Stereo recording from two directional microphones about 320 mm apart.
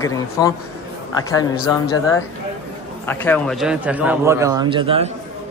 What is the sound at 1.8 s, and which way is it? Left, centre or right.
A man's voice, centre.